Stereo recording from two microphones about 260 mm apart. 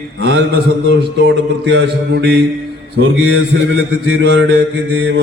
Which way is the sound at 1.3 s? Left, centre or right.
Right.